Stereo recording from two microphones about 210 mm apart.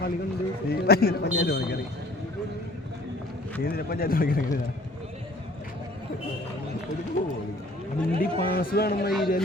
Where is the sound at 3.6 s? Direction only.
45° left (ahead or behind).